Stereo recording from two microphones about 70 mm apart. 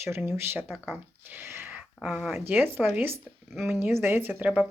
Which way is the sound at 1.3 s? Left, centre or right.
Right.